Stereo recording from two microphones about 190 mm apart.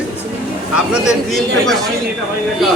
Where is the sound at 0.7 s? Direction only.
5° right (ahead or behind).